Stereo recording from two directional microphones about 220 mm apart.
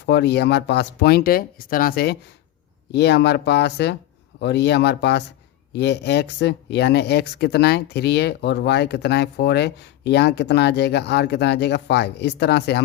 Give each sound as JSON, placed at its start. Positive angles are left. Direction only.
{"t": 0.0, "sound": "speech", "side_deg": 50}